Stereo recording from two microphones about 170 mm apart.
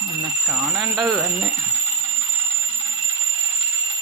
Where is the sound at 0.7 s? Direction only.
5° right (ahead or behind).